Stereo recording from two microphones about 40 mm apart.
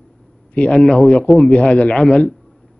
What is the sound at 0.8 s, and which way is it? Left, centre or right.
Speech, left.